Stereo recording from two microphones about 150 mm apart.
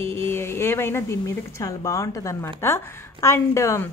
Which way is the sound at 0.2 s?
15° left (ahead or behind).